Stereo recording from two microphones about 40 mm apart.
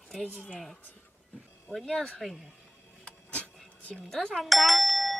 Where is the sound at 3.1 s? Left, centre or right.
Left.